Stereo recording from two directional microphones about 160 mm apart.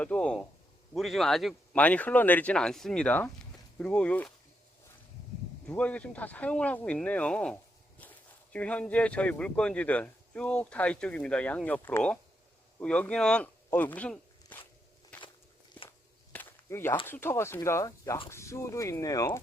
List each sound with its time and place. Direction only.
0.0 s speech: 5° left (ahead or behind)
5.6 s speech: 10° left (ahead or behind)
15.1 s walk: 10° left (ahead or behind)
16.3 s a sound: 10° left (ahead or behind)
17.1 s speech: 15° left (ahead or behind)